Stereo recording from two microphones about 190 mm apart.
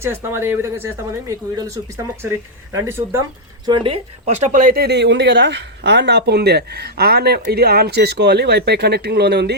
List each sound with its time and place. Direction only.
0.0 s speech: 10° right (ahead or behind)
3.7 s speech: 30° right (ahead or behind); by 9.6 s 60° right (ahead or behind)